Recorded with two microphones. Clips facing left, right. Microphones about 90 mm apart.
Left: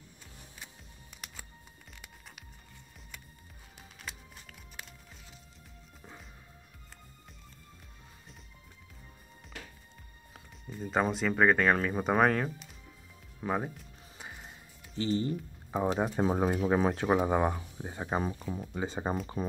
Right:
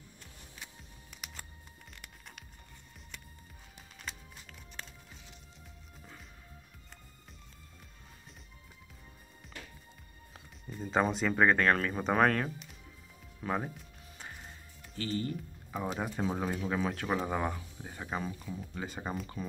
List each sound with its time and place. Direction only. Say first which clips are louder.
4.0 s music: even; centre (ahead or behind)
10.3 s speech: left 1 dB; centre (ahead or behind)
13.4 s music: left 2 dB; 10° left (ahead or behind)
15.0 s speech: left 5 dB; 25° left (ahead or behind)
17.2 s speech: left 6 dB; 20° left (ahead or behind)
18.6 s speech: left 7 dB; 10° left (ahead or behind)
18.9 s speech: left 6 dB; 25° left (ahead or behind)